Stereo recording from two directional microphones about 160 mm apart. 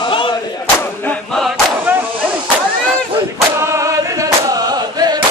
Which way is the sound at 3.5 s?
15° right (ahead or behind).